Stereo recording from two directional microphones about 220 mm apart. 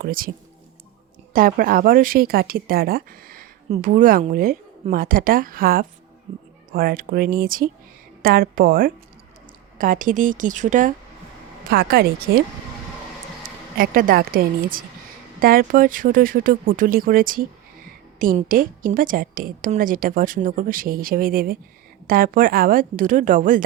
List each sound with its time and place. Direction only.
0.0 s speech: 40° right (ahead or behind)
1.3 s speech: 40° right (ahead or behind)
6.3 s speech: 30° right (ahead or behind)
6.7 s speech: 40° right (ahead or behind)
13.7 s speech: 40° right (ahead or behind)